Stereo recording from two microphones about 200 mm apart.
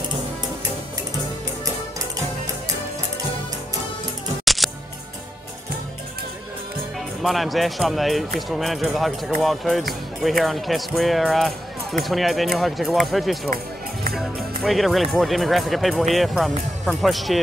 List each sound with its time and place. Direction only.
4.6 s music: centre (ahead or behind)
7.2 s speech: centre (ahead or behind)